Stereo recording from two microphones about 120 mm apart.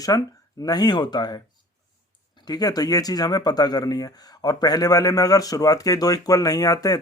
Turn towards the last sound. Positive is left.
turn(degrees=30)  # may be behind; listen again after turning